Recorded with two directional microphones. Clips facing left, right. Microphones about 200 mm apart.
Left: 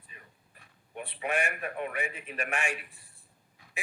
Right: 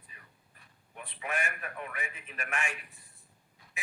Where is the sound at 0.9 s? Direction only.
30° left (ahead or behind).